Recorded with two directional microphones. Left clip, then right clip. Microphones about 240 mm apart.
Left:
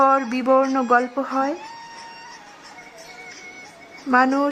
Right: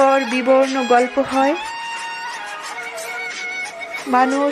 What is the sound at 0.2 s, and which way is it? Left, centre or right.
Speech, right.